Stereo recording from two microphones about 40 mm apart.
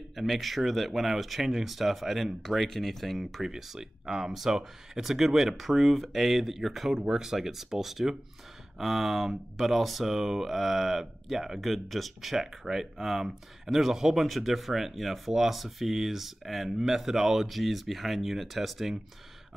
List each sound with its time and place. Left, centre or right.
0.1 s speech: centre
3.4 s speech: centre